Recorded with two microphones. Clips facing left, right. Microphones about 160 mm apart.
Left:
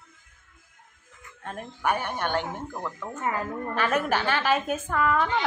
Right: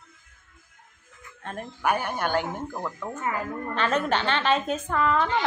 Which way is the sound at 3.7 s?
10° left (ahead or behind).